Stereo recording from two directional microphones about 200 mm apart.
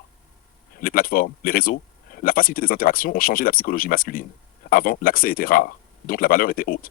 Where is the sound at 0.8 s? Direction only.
45° left (ahead or behind).